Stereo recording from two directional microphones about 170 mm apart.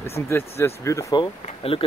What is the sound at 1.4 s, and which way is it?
Speech, 35° left (ahead or behind).